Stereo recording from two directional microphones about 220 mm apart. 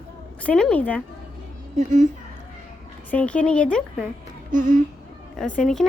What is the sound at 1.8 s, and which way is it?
Speech, 35° right (ahead or behind).